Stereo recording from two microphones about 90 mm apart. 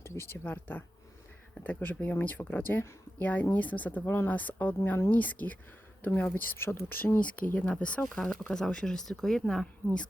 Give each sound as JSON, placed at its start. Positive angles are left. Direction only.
{"t": 0.0, "sound": "speech", "side_deg": 30}